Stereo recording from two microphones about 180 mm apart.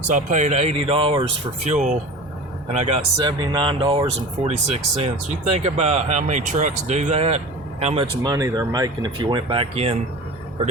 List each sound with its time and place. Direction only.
0.1 s speech: 40° right (ahead or behind)
1.6 s speech: 40° right (ahead or behind); by 4.0 s 25° right (ahead or behind)
4.4 s speech: 35° right (ahead or behind)
8.2 s speech: 20° right (ahead or behind); by 10.0 s 35° right (ahead or behind)